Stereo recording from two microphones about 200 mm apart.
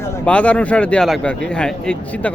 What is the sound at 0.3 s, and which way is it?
Speech, 5° left (ahead or behind).